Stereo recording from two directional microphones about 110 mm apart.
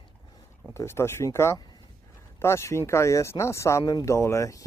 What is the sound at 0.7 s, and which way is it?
Speech, 25° left (ahead or behind).